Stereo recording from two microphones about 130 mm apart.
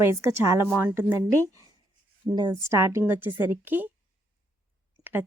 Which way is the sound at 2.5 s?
20° right (ahead or behind).